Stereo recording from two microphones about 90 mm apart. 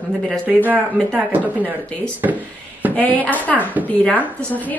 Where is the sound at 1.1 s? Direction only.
20° right (ahead or behind).